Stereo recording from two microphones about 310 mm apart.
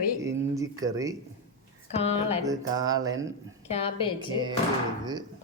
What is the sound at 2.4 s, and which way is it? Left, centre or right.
Speech, centre.